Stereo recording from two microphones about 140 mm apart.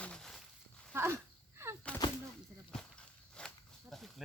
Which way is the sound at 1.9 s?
10° left (ahead or behind).